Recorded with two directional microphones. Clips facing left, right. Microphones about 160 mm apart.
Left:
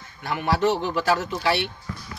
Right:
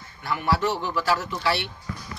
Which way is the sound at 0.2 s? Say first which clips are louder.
Left 2 dB; 20° left (ahead or behind).